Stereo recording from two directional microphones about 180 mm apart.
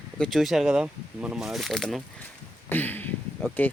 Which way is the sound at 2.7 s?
10° left (ahead or behind).